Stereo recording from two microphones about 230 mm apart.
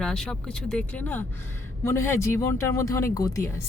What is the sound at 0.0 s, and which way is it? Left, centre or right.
Speech, centre.